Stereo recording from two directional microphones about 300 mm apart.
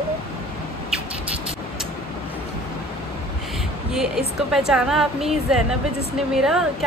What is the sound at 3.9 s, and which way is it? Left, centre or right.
A woman's voice, centre.